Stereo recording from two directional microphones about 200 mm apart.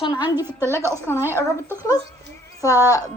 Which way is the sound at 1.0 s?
10° left (ahead or behind).